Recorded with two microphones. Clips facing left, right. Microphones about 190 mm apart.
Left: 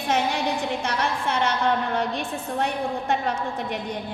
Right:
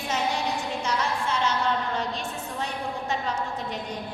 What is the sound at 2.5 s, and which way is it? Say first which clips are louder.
Speech: left 7 dB; 60° left (ahead or behind).